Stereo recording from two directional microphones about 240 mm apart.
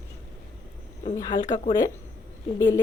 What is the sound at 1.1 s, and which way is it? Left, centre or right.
Speech, centre.